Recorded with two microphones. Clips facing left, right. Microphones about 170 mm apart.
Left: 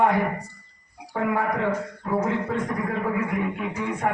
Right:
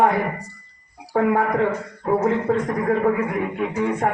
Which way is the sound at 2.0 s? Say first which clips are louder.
Right 6 dB; 50° right (ahead or behind).